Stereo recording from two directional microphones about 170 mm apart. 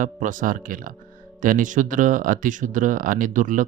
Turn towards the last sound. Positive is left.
turn(degrees=-50)  # may be behind; listen again after turning